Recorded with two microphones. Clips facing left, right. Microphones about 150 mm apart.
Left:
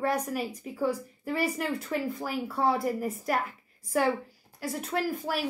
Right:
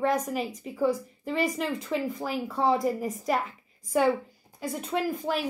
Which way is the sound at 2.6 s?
20° right (ahead or behind).